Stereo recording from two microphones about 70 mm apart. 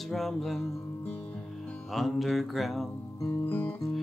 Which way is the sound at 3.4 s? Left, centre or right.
Left.